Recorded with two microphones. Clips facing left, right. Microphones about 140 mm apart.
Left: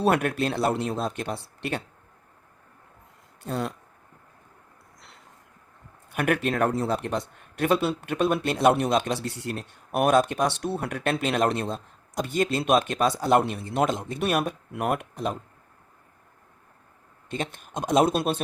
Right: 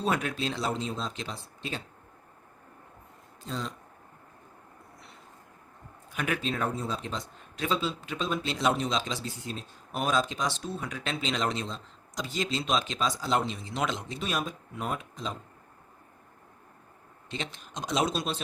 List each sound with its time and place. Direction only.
0.0 s speech: 60° left (ahead or behind)
3.4 s speech: 65° left (ahead or behind)
6.1 s speech: 60° left (ahead or behind)
17.2 s speech: 50° left (ahead or behind)